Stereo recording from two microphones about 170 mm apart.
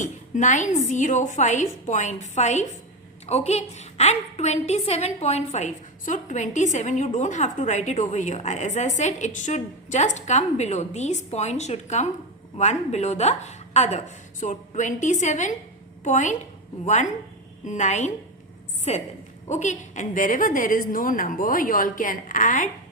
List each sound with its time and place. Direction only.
0.0 s a woman's voice: 45° left (ahead or behind)